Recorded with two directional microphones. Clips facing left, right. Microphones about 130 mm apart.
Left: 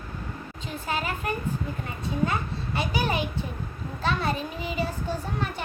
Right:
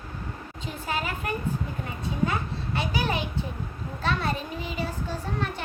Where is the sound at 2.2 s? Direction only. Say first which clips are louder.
Even; centre (ahead or behind).